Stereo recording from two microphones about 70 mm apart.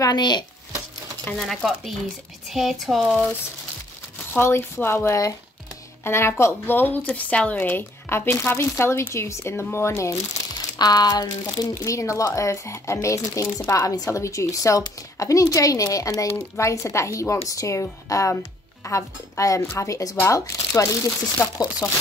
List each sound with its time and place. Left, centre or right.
0.1 s speech: left
1.4 s speech: centre
4.3 s speech: left
10.8 s speech: left
11.8 s speech: left